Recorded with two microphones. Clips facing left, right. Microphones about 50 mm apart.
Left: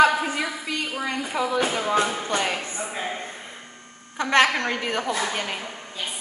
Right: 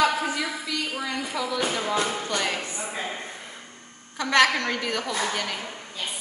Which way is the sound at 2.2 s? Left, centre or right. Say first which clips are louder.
Left 2 dB; left.